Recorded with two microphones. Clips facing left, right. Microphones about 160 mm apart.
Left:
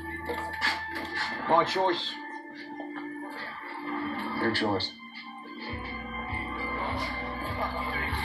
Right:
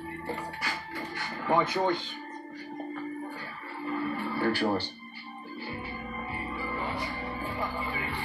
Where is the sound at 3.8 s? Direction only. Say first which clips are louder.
Right 2 dB; 15° right (ahead or behind).